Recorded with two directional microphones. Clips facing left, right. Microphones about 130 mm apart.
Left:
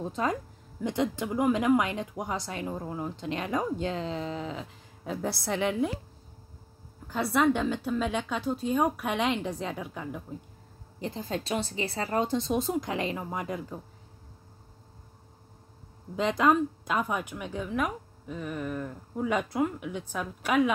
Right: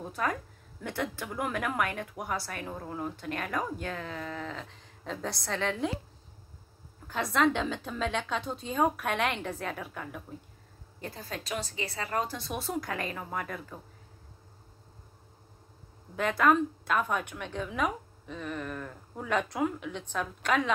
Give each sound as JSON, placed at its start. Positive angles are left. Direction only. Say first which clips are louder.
{"t": 0.0, "sound": "a woman's voice", "louder": "left 3 dB", "side_deg": 20}
{"t": 4.6, "sound": "a woman's voice", "louder": "left 3 dB", "side_deg": 10}
{"t": 7.1, "sound": "a woman's voice", "louder": "left 2 dB", "side_deg": 10}
{"t": 16.2, "sound": "a woman's voice", "louder": "left 1 dB", "side_deg": 20}